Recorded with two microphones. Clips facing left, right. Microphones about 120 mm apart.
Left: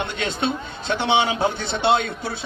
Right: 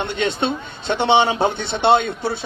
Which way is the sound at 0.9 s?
25° right (ahead or behind).